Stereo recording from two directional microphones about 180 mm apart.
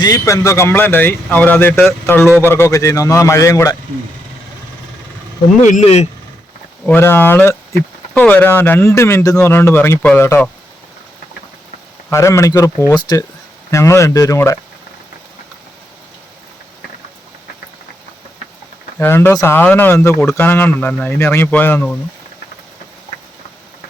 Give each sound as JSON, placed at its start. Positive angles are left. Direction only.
{"t": 0.0, "sound": "speech", "side_deg": 20}
{"t": 5.6, "sound": "speech", "side_deg": 40}
{"t": 6.8, "sound": "speech", "side_deg": 10}
{"t": 12.1, "sound": "speech", "side_deg": 15}
{"t": 18.9, "sound": "speech", "side_deg": 10}